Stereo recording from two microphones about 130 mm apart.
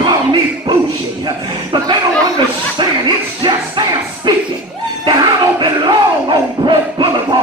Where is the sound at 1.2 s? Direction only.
35° right (ahead or behind).